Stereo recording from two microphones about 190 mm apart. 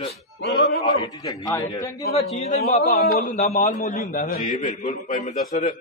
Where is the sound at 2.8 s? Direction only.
55° left (ahead or behind).